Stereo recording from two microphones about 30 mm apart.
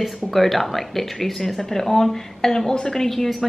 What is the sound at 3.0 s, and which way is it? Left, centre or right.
Speech, centre.